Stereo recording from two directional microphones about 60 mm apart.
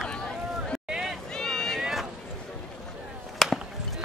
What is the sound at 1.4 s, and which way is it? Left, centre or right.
Vehicle, centre.